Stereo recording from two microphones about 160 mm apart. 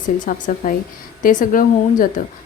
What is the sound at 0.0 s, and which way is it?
A woman's voice, 55° left (ahead or behind).